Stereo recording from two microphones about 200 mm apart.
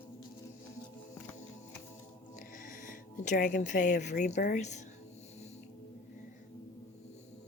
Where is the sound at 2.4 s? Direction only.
40° left (ahead or behind).